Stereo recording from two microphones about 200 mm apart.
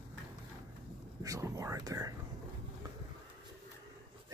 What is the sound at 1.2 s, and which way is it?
Whispering, 15° right (ahead or behind).